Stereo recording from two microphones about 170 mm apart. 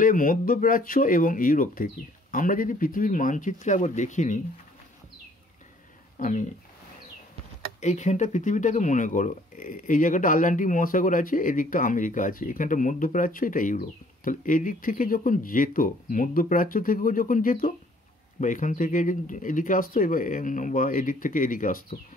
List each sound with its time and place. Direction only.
0.0 s speech: 55° left (ahead or behind)
6.1 s speech: 50° left (ahead or behind)
7.8 s speech: 45° left (ahead or behind)